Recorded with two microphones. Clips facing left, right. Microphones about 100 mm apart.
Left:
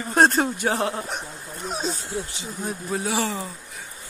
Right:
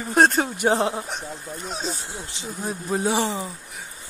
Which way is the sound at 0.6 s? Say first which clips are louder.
Right 3 dB; 25° right (ahead or behind).